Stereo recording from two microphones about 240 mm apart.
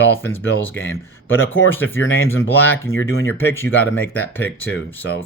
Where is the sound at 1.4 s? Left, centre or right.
Left.